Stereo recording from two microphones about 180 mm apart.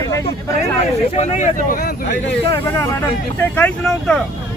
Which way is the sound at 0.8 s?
40° left (ahead or behind).